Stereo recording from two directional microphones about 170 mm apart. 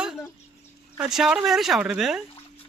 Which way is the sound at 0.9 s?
5° right (ahead or behind).